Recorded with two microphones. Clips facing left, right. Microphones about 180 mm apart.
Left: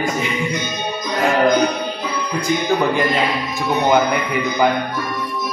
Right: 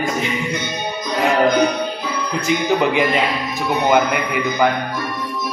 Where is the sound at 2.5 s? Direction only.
80° right.